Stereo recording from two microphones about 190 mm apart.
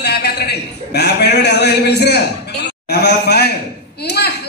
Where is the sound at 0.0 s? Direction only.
60° left (ahead or behind).